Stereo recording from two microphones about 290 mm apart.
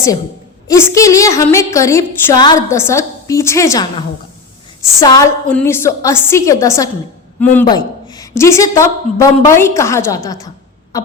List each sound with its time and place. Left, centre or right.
0.7 s a woman's voice: centre